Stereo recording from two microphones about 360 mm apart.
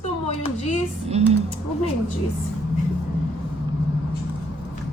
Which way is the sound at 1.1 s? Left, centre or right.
Centre.